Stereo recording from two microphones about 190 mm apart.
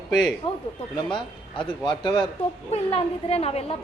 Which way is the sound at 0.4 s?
30° left (ahead or behind).